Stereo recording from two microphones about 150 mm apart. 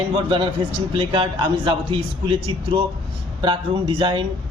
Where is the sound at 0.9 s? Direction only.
35° right (ahead or behind).